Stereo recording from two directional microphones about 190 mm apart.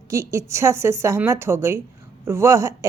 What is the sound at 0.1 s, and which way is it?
Speech, 15° right (ahead or behind).